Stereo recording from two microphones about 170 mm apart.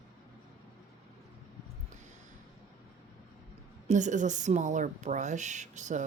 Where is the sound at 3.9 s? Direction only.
45° right (ahead or behind).